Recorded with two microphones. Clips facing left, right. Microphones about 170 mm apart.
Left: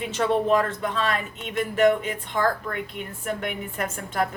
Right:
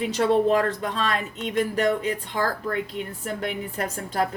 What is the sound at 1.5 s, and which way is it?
Speech, 40° right (ahead or behind).